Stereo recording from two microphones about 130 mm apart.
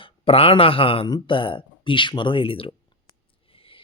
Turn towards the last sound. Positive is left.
turn(degrees=45)  # may be behind; listen again after turning